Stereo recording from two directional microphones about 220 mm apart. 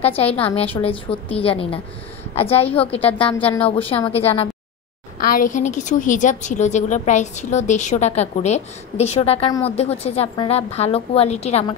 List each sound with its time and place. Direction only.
0.0 s a woman's voice: 25° left (ahead or behind)
5.2 s a woman's voice: 40° left (ahead or behind)